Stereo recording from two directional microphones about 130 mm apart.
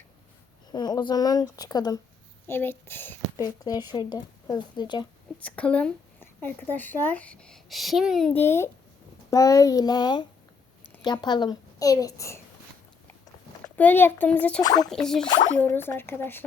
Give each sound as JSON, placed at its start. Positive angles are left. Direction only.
{"t": 0.7, "sound": "a woman's voice", "side_deg": 35}
{"t": 2.5, "sound": "a woman's voice", "side_deg": 15}
{"t": 3.3, "sound": "a woman's voice", "side_deg": 30}
{"t": 5.4, "sound": "a woman's voice", "side_deg": 10}
{"t": 8.3, "sound": "a woman's voice", "side_deg": 15}
{"t": 13.7, "sound": "a woman's voice", "side_deg": 15}
{"t": 14.6, "sound": "a woman's voice", "side_deg": 30}
{"t": 14.8, "sound": "speech", "side_deg": 5}
{"t": 15.5, "sound": "a woman's voice", "side_deg": 15}